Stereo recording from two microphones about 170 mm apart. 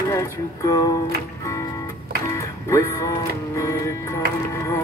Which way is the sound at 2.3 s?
15° left (ahead or behind).